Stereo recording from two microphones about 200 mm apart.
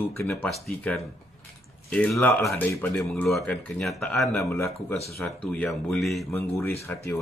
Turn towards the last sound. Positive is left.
turn(degrees=10)  # may be behind; listen again after turning